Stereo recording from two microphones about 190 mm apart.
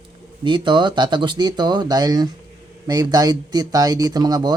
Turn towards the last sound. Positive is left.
turn(degrees=-20)  # may be behind; listen again after turning